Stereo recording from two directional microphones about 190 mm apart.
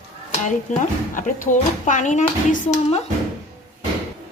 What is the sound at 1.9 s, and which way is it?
Speech, 40° left (ahead or behind).